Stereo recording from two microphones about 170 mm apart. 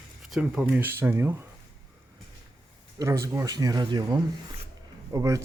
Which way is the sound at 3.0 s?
20° right (ahead or behind).